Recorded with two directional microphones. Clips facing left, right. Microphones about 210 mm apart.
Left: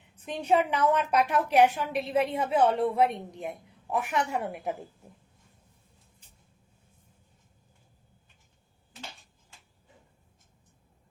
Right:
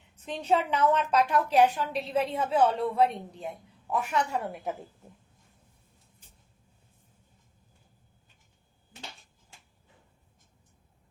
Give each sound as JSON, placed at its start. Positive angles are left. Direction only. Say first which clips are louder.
{"t": 0.3, "sound": "a woman's voice", "louder": "left 2 dB", "side_deg": 15}